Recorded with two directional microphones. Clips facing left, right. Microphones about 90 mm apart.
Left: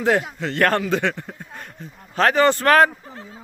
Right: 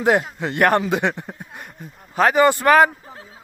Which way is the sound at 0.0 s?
15° right (ahead or behind).